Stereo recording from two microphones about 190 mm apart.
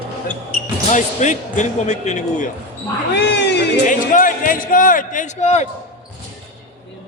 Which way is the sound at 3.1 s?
65° left (ahead or behind).